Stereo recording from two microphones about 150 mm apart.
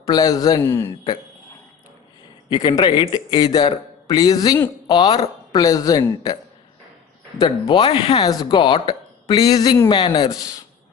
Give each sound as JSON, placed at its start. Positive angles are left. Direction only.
{"t": 0.0, "sound": "speech", "side_deg": 25}
{"t": 2.5, "sound": "speech", "side_deg": 30}
{"t": 7.3, "sound": "speech", "side_deg": 30}